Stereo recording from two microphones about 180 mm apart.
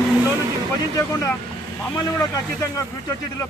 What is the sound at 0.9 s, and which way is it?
A man's voice, 20° left (ahead or behind).